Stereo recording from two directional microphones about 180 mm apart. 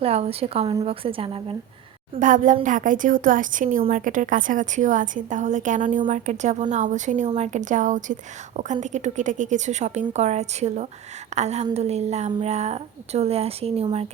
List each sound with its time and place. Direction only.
0.0 s a woman's voice: 35° right (ahead or behind)
2.1 s a woman's voice: 45° right (ahead or behind)